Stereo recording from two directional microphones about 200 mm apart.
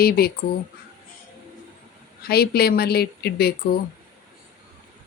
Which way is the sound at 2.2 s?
50° left (ahead or behind).